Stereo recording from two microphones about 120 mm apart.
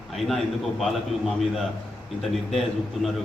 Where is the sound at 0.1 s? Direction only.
Centre (ahead or behind).